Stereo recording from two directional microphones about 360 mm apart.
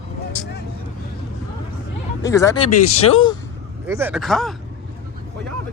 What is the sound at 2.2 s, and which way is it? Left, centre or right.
Speech, centre.